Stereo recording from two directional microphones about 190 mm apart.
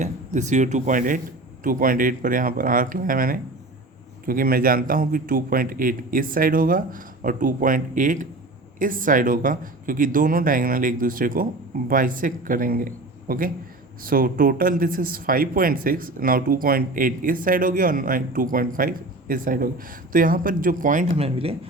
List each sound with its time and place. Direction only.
0.0 s speech: 40° right (ahead or behind)